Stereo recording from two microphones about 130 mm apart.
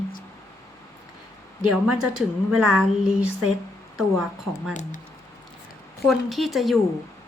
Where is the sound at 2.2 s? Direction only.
Centre (ahead or behind).